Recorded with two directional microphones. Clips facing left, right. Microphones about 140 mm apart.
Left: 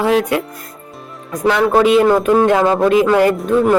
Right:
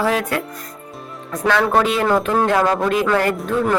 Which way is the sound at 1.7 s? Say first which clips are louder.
Left 6 dB; 15° left (ahead or behind).